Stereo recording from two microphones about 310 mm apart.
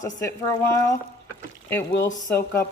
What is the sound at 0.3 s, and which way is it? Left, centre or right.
Speech, centre.